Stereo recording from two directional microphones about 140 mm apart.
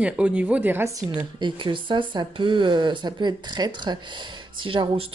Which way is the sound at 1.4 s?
35° right (ahead or behind).